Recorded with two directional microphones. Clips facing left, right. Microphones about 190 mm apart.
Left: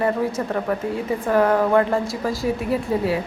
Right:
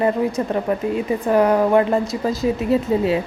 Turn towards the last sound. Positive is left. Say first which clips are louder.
# right 4 dB
turn(degrees=-20)  # may be behind; listen again after turning